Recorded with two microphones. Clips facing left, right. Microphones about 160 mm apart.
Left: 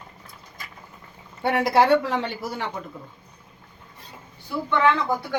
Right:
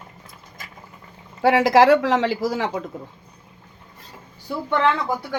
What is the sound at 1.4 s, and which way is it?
Speech, 90° right.